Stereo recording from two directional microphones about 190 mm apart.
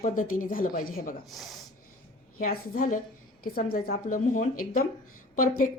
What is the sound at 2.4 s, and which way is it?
Speech, 45° left (ahead or behind).